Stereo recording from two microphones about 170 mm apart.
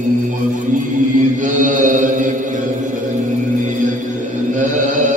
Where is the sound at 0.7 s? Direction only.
50° right (ahead or behind).